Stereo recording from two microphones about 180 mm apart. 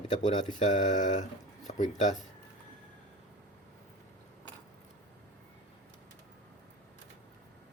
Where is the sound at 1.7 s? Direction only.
40° left (ahead or behind).